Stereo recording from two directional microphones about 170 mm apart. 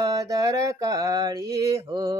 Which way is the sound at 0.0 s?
20° right (ahead or behind).